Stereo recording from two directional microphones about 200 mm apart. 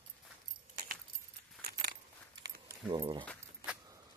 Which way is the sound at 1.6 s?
50° right (ahead or behind).